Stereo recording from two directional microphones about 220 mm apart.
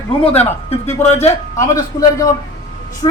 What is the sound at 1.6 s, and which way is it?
Speech, 15° left (ahead or behind).